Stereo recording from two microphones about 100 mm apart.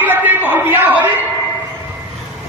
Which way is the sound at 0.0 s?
20° right (ahead or behind).